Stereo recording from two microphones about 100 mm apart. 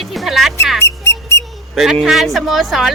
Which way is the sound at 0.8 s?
25° left (ahead or behind).